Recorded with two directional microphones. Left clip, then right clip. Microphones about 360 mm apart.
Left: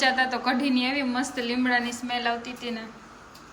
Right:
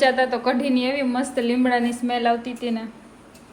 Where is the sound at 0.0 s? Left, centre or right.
Centre.